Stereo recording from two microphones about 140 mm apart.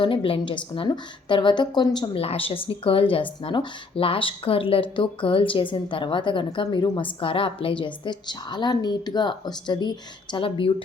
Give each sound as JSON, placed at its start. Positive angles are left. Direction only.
{"t": 0.0, "sound": "speech", "side_deg": 40}
{"t": 2.2, "sound": "speech", "side_deg": 40}